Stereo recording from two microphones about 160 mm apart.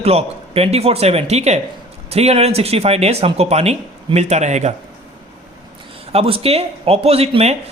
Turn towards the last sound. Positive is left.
turn(degrees=-40)  # may be behind; listen again after turning